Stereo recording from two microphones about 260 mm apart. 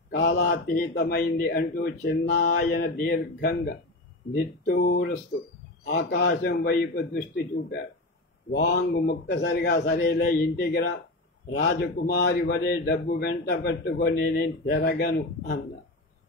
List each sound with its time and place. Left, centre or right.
0.1 s speech: left
8.5 s speech: left